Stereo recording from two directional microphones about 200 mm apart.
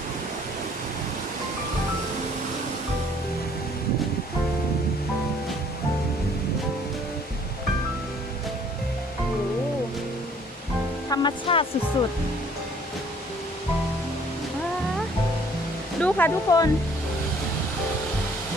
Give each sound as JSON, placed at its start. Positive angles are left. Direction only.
{"t": 11.1, "sound": "music", "side_deg": 20}
{"t": 16.0, "sound": "speech", "side_deg": 5}